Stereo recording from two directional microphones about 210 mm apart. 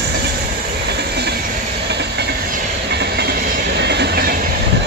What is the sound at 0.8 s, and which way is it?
Train, 50° right (ahead or behind).